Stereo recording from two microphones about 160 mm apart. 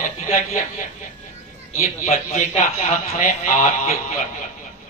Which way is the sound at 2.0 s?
45° left (ahead or behind).